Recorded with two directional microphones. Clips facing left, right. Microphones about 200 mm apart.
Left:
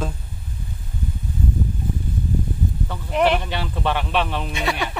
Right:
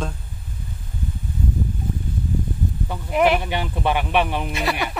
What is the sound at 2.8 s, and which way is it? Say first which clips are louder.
Speech: right 1 dB; 10° right (ahead or behind).